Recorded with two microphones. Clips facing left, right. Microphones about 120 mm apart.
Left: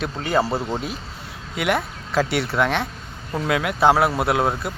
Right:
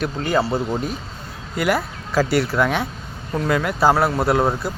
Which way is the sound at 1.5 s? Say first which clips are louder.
Right 2 dB; centre (ahead or behind).